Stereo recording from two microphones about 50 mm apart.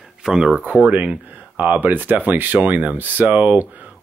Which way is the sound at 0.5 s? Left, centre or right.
Right.